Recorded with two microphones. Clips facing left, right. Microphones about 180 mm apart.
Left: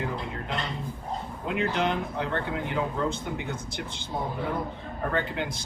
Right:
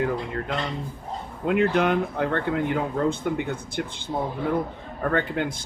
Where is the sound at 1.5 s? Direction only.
55° right (ahead or behind).